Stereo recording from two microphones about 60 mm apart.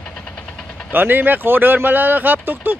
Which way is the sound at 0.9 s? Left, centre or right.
Right.